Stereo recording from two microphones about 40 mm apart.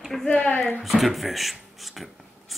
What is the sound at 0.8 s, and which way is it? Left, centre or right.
Speech, centre.